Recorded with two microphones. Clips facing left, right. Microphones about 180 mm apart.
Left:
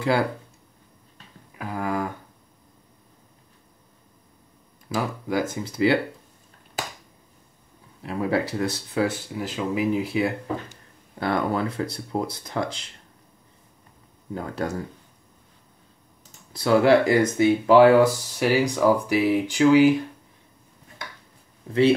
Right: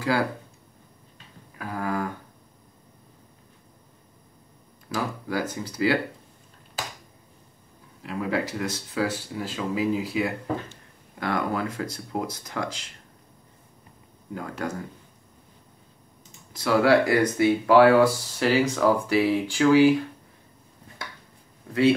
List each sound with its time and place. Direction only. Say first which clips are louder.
1.6 s speech: left 2 dB; 15° left (ahead or behind)
4.9 s speech: left 3 dB; 20° left (ahead or behind)
8.0 s speech: left 3 dB; 30° left (ahead or behind)
14.3 s speech: left 3 dB; 30° left (ahead or behind)
16.5 s speech: left 2 dB; 25° left (ahead or behind)